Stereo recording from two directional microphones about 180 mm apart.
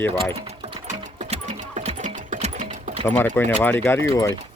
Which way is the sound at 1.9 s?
40° right (ahead or behind).